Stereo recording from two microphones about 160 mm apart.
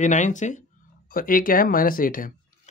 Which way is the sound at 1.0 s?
60° left (ahead or behind).